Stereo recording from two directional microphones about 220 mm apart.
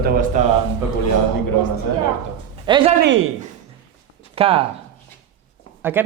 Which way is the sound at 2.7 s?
20° right (ahead or behind).